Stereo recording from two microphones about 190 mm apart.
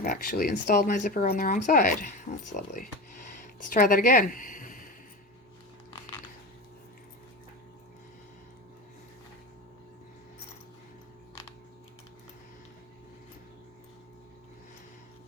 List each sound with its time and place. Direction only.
0.0 s speech: 50° left (ahead or behind)